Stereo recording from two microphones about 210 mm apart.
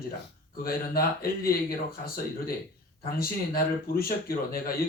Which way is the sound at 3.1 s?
45° left (ahead or behind).